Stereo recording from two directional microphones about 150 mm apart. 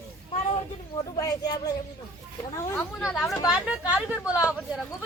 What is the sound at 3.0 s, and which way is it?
Speech, centre (ahead or behind).